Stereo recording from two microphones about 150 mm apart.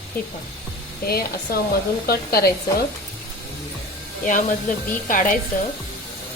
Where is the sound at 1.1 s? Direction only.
90° left.